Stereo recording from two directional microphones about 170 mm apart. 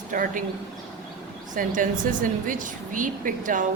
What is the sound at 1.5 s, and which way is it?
A woman's voice, 50° right (ahead or behind).